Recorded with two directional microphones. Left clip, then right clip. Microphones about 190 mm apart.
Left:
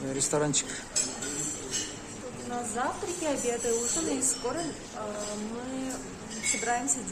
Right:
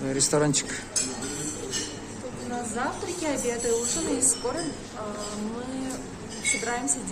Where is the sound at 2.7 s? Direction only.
35° left (ahead or behind).